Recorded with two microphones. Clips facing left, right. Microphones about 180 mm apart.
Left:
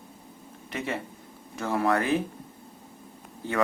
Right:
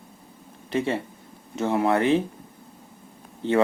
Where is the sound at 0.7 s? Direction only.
30° right (ahead or behind).